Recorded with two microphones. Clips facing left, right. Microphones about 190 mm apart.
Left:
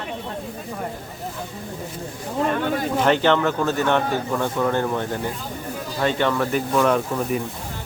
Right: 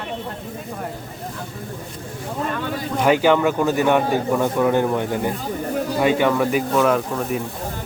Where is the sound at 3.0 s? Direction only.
10° right (ahead or behind).